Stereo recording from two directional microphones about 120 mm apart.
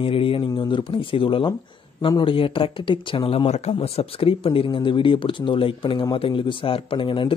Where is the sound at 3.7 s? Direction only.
55° left (ahead or behind).